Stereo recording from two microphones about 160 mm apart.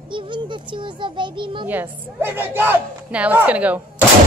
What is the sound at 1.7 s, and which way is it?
A woman's voice, 10° right (ahead or behind).